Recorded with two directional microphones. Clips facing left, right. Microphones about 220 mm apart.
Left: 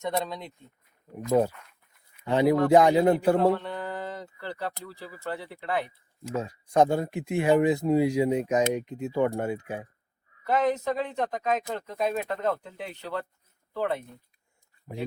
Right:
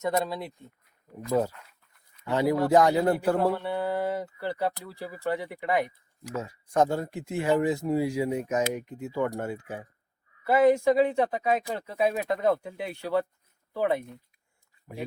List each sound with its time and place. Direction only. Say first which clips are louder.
0.0 s speech: right 2 dB; 5° right (ahead or behind)
1.3 s a man's voice: left 3 dB; 20° left (ahead or behind)
3.4 s speech: left 1 dB; 10° right (ahead or behind)
6.2 s speech: left 3 dB; 15° left (ahead or behind)
10.4 s speech: right 5 dB; 10° right (ahead or behind)